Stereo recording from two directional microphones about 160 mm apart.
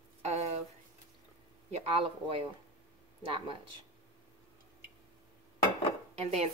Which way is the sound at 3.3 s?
35° right (ahead or behind).